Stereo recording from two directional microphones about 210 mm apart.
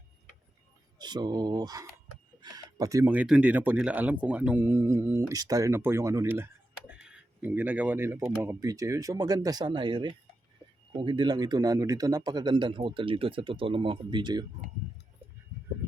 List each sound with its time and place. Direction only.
0.9 s a man's voice: 20° right (ahead or behind)